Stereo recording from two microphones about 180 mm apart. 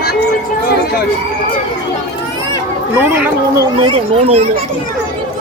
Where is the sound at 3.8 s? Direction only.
30° right (ahead or behind).